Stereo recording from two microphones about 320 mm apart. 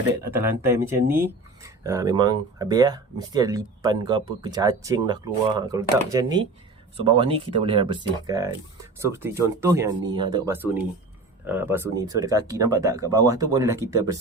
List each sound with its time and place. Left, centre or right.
0.3 s speech: centre